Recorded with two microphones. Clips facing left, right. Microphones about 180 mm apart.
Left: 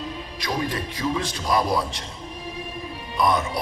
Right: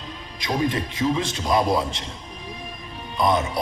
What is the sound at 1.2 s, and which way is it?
Speech, 25° right (ahead or behind).